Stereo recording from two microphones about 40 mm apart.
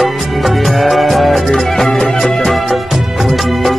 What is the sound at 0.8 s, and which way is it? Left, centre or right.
Music, centre.